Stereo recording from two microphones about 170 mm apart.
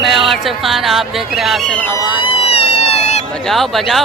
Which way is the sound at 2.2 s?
35° left (ahead or behind).